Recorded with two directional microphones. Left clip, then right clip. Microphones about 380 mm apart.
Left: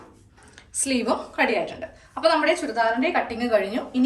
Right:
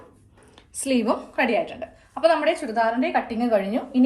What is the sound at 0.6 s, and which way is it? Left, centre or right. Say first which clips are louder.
A woman's voice: right 2 dB; centre.